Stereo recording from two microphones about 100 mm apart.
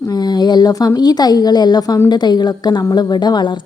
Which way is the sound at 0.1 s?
45° left (ahead or behind).